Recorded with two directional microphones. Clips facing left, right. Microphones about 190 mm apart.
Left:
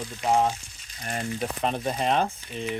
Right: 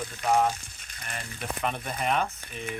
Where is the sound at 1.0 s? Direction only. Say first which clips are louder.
Left 9 dB; 40° left (ahead or behind).